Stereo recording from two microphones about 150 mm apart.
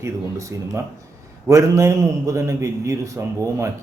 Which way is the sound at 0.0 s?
20° right (ahead or behind).